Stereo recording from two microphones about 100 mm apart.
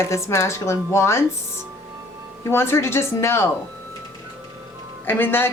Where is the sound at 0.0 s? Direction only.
30° left (ahead or behind).